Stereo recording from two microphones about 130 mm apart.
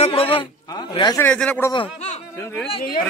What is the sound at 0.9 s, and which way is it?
Speech, 35° left (ahead or behind).